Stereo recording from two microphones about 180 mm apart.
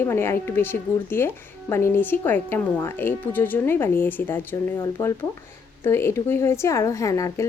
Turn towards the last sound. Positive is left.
turn(degrees=20)  # may be behind; listen again after turning